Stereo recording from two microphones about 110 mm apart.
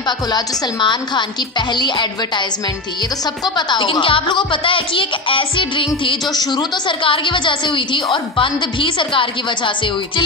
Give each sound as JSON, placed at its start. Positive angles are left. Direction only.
{"t": 0.3, "sound": "speech", "side_deg": 45}
{"t": 3.4, "sound": "speech", "side_deg": 45}